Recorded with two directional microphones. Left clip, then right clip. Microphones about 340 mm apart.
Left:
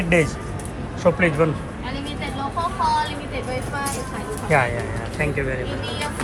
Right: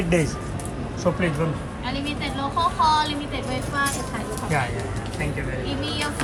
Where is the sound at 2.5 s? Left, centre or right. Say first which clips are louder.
Right 2 dB; centre.